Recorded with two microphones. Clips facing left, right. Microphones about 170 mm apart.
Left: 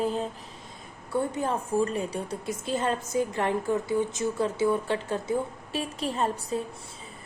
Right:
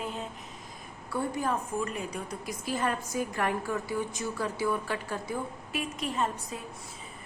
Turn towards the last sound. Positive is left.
turn(degrees=30)  # may be behind; listen again after turning